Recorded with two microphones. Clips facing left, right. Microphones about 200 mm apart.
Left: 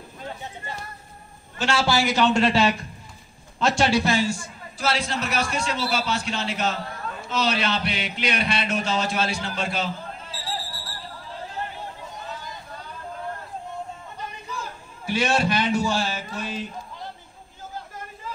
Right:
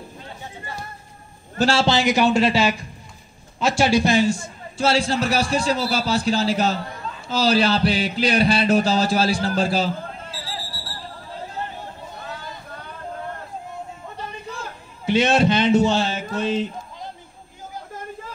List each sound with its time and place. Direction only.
1.6 s a man's voice: 30° right (ahead or behind)
1.9 s a man's voice: 20° right (ahead or behind)
15.0 s a man's voice: 20° right (ahead or behind)